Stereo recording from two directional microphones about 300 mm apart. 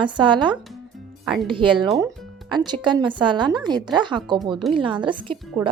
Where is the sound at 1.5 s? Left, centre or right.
Centre.